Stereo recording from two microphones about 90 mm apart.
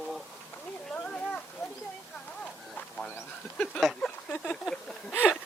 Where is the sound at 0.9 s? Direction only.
10° left (ahead or behind).